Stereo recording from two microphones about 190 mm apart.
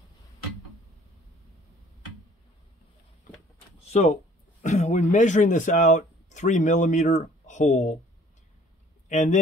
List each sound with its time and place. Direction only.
3.9 s speech: 40° left (ahead or behind)
9.1 s a man's voice: 40° left (ahead or behind)